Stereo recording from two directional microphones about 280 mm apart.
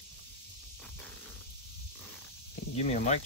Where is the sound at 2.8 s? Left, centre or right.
Left.